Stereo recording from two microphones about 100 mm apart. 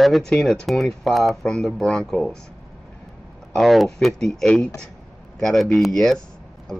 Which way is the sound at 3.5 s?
Centre (ahead or behind).